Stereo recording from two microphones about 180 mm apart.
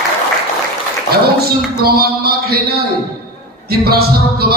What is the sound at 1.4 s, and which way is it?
Speech, 60° right (ahead or behind).